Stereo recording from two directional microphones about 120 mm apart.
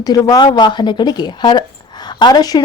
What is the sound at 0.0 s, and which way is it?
A woman's voice, 30° left (ahead or behind).